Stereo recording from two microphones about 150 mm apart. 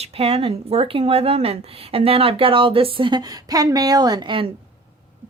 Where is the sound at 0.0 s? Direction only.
40° right (ahead or behind).